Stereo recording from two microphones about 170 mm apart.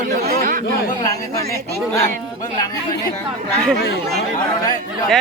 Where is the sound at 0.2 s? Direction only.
45° right (ahead or behind).